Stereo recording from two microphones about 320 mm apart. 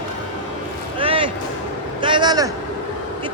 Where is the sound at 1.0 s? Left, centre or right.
Centre.